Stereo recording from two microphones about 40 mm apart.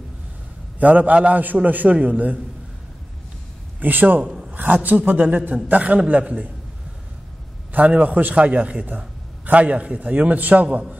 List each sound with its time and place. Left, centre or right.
0.7 s a man's voice: right
3.8 s a man's voice: right
4.2 s a man's voice: right
4.5 s a man's voice: right
7.7 s a man's voice: right
8.4 s a man's voice: right